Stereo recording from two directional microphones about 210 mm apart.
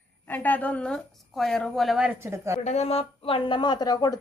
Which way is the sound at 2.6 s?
35° left (ahead or behind).